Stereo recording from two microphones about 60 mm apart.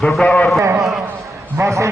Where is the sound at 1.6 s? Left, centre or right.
Right.